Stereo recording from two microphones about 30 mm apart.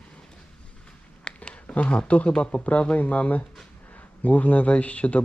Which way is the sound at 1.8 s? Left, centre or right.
Left.